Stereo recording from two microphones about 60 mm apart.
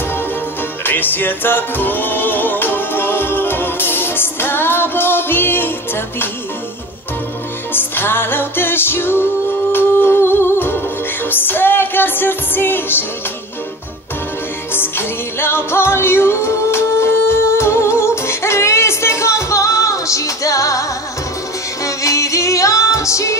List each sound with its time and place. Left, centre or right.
0.8 s music: left
7.7 s music: left
14.7 s music: left
21.8 s music: left